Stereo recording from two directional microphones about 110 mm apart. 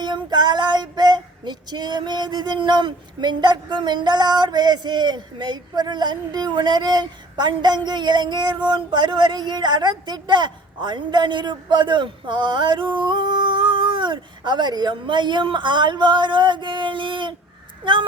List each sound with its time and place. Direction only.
0.0 s female singing: 45° right (ahead or behind)